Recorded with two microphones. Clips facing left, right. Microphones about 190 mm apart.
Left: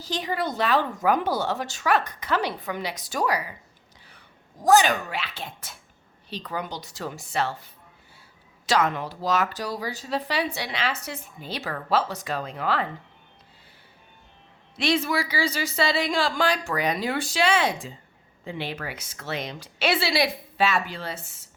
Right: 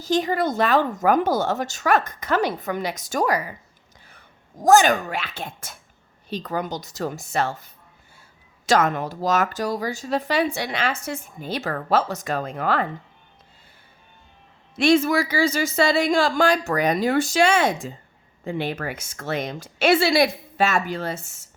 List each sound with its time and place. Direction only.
0.0 s speech: 45° right (ahead or behind)
4.6 s speech: 45° right (ahead or behind)
14.8 s speech: 45° right (ahead or behind)